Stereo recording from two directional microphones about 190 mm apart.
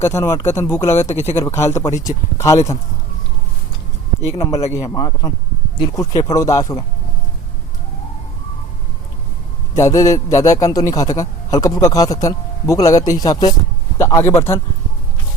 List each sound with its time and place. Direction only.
0.0 s a man's voice: 15° left (ahead or behind)
4.3 s a man's voice: 15° left (ahead or behind)
9.7 s a man's voice: 15° left (ahead or behind)